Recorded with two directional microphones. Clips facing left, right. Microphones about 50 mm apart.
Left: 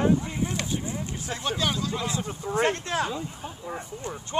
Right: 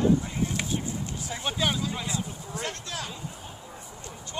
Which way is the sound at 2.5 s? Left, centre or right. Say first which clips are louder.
Left 11 dB; left.